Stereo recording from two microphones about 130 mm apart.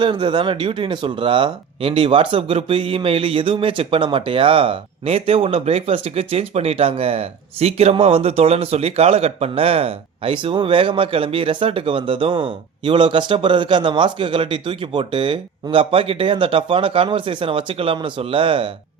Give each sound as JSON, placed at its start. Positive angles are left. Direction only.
{"t": 0.0, "sound": "speech", "side_deg": -40}